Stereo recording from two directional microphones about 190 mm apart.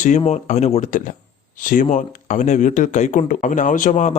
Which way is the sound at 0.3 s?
40° left (ahead or behind).